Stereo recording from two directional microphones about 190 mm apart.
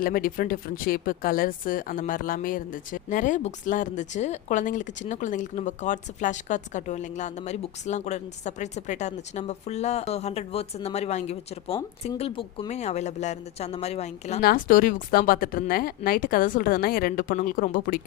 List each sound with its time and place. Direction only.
0.0 s speech: 50° left (ahead or behind)
14.4 s speech: 50° left (ahead or behind)